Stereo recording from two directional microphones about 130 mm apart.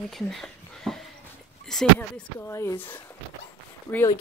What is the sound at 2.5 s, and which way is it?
Speech, 20° left (ahead or behind).